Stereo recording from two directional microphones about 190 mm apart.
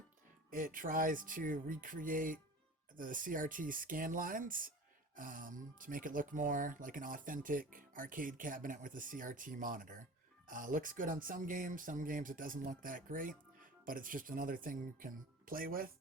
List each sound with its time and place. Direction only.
0.5 s speech: 45° right (ahead or behind)